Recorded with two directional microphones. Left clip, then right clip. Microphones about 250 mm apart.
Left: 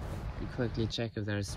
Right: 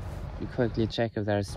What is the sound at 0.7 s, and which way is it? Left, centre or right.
Speech, centre.